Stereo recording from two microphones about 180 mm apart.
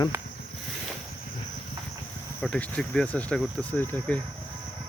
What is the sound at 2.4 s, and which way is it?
Speech, 5° left (ahead or behind).